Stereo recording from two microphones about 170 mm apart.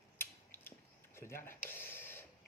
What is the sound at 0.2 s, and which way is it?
Mechanisms, 10° left (ahead or behind).